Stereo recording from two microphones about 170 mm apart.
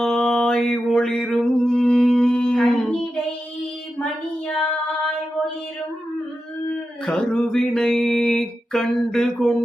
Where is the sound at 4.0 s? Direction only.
5° left (ahead or behind).